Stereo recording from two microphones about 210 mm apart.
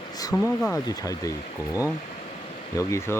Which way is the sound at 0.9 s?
15° left (ahead or behind).